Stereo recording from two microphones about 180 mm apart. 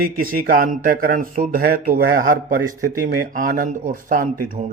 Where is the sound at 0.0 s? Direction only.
55° right (ahead or behind).